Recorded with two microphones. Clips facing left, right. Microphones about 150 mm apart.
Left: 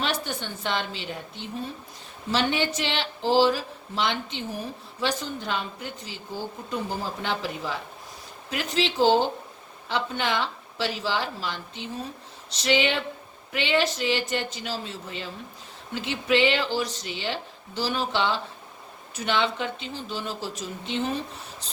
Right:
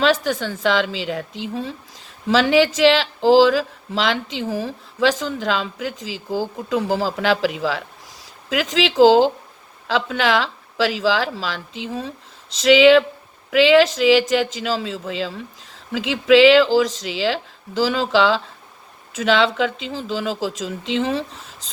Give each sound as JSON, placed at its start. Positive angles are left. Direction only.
{"t": 0.0, "sound": "speech", "side_deg": -90}